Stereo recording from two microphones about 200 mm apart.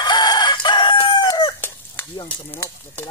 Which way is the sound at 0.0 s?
20° left (ahead or behind).